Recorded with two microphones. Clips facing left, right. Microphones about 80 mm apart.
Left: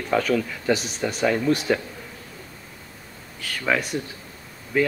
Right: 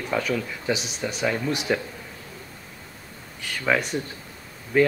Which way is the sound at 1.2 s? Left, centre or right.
Centre.